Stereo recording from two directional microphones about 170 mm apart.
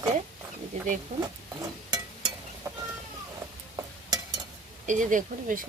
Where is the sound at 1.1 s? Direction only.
45° right (ahead or behind).